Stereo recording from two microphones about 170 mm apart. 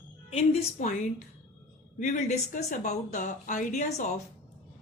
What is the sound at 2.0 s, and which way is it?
Speech, 45° left (ahead or behind).